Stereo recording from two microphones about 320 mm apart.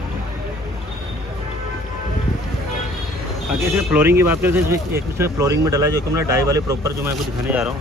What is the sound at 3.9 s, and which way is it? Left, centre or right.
Speech, centre.